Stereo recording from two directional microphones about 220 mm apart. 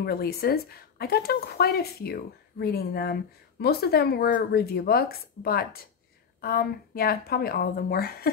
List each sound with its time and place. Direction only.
0.0 s speech: 45° left (ahead or behind)